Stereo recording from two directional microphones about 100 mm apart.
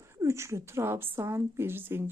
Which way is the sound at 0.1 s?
30° right (ahead or behind).